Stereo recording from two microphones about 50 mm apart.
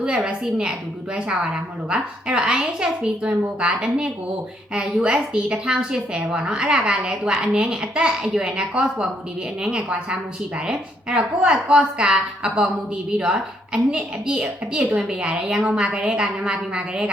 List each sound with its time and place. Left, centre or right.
0.3 s a woman's voice: centre